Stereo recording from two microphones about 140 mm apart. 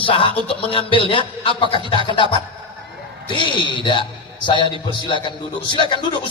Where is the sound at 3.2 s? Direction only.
35° left (ahead or behind).